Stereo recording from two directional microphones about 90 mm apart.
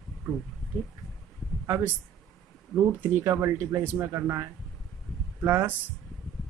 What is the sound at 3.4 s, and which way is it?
Speech, 35° right (ahead or behind).